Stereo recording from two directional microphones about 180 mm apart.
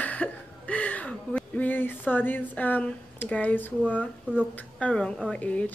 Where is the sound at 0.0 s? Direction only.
10° left (ahead or behind).